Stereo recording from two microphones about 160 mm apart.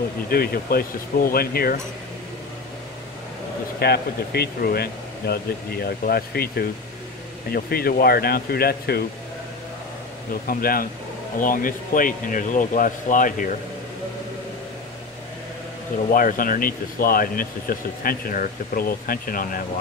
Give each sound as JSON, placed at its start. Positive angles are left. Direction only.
{"t": 0.3, "sound": "speech", "side_deg": 70}
{"t": 3.8, "sound": "speech", "side_deg": 80}
{"t": 10.4, "sound": "speech", "side_deg": 65}
{"t": 16.1, "sound": "speech", "side_deg": 60}